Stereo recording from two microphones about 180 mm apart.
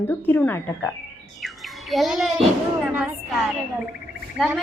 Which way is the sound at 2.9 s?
10° right (ahead or behind).